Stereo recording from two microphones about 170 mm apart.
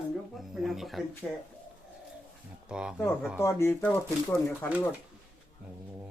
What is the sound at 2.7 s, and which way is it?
Speech, 5° right (ahead or behind).